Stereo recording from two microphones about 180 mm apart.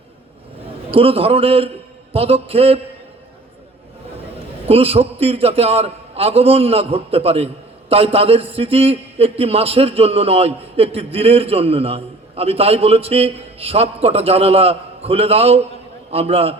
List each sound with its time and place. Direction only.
0.9 s a man's voice: 30° right (ahead or behind)
4.6 s a man's voice: 35° right (ahead or behind)